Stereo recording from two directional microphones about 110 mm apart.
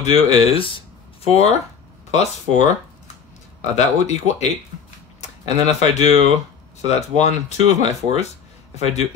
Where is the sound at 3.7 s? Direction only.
90° left.